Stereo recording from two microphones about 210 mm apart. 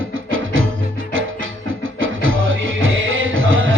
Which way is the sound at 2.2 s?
70° right (ahead or behind).